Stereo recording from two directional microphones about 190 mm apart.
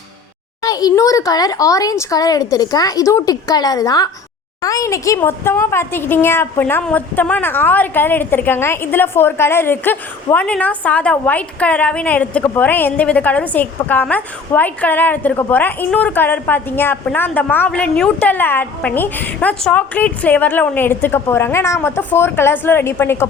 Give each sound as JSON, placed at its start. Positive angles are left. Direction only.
{"t": 0.6, "sound": "a child's voice", "side_deg": 20}